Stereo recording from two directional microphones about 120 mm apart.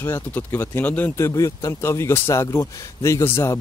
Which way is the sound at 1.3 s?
25° left (ahead or behind).